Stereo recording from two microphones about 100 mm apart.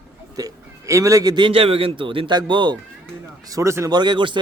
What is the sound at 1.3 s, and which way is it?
A man's voice, 60° right (ahead or behind).